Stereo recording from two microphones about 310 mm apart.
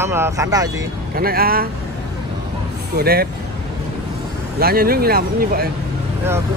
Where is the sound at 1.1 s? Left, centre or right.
Right.